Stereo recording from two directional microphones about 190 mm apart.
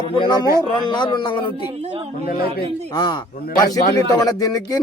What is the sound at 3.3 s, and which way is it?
Speech, 50° left (ahead or behind).